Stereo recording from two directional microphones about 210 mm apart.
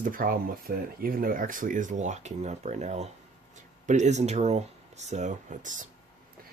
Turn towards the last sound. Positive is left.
turn(degrees=-35)  # may be behind; listen again after turning